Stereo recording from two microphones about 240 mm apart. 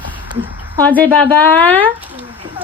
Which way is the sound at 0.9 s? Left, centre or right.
Centre.